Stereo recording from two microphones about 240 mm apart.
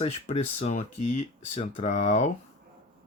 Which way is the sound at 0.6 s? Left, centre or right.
Left.